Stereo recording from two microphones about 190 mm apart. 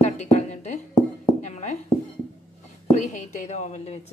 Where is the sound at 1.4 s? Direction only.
40° left (ahead or behind).